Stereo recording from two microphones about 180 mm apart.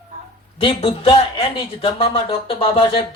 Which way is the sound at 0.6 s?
30° left (ahead or behind).